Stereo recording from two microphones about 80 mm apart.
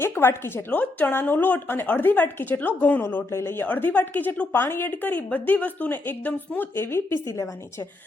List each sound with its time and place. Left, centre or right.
0.0 s a woman's voice: left
0.7 s a woman's voice: centre
3.2 s a woman's voice: left